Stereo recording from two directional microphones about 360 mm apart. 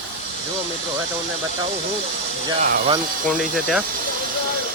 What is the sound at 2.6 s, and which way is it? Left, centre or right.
Speech, right.